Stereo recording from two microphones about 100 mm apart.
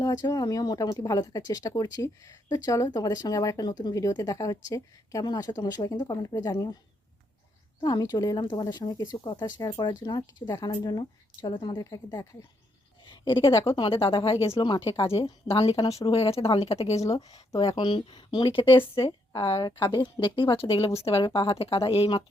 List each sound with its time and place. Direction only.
0.0 s speech: 40° left (ahead or behind)
7.8 s speech: 45° left (ahead or behind)
11.0 s speech: 50° left (ahead or behind)
11.8 s speech: 40° left (ahead or behind)
13.1 s a sound: 55° left (ahead or behind)
13.5 s speech: 30° left (ahead or behind)
13.7 s a woman's voice: 60° left (ahead or behind)
16.0 s speech: 80° left
17.0 s speech: 35° left (ahead or behind)
17.7 s speech: 50° left (ahead or behind)
18.5 s a woman's voice: 60° left (ahead or behind)